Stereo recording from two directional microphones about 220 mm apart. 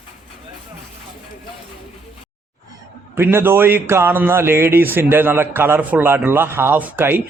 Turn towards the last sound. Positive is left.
turn(degrees=-10)  # may be behind; listen again after turning